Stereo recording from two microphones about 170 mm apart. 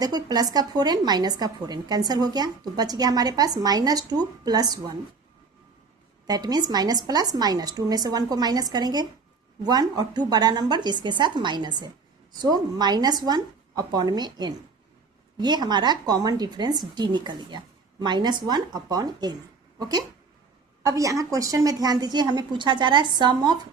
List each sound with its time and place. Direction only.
0.0 s a woman's voice: 25° right (ahead or behind)
6.2 s a woman's voice: 25° right (ahead or behind)